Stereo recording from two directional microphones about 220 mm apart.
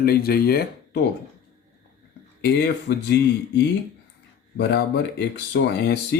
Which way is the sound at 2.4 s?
50° left (ahead or behind).